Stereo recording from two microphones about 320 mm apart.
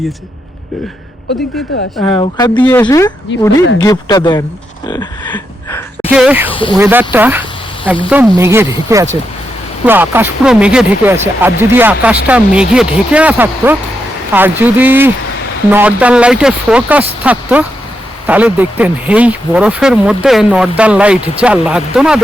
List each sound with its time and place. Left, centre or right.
2.0 s speech: centre
3.6 s speech: left
3.8 s speech: centre
4.9 s gasp: centre
6.1 s speech: centre
6.5 s speech: centre
6.7 s speech: centre